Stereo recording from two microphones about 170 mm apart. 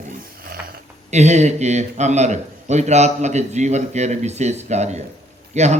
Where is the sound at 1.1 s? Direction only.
40° right (ahead or behind).